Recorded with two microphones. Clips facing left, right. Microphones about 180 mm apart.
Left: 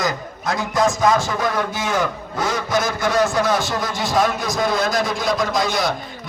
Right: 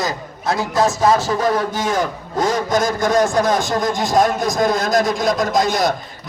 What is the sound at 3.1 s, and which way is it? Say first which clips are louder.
A man's voice: right 2 dB; 40° right (ahead or behind).